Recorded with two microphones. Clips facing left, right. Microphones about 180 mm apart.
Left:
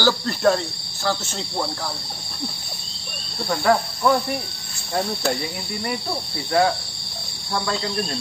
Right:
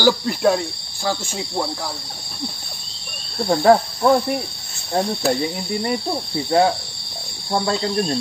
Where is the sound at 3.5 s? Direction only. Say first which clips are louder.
Right 5 dB; 30° right (ahead or behind).